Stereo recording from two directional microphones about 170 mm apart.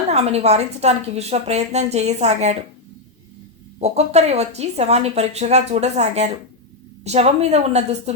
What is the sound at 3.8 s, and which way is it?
A woman's voice, 40° right (ahead or behind).